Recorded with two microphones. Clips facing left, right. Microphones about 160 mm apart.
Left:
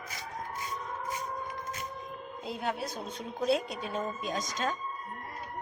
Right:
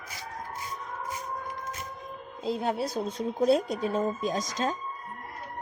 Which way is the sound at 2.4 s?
35° right (ahead or behind).